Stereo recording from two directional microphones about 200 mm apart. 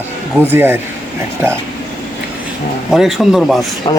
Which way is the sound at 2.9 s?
Centre (ahead or behind).